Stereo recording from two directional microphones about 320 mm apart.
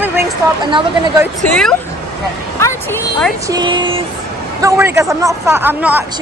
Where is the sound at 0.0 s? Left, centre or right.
Centre.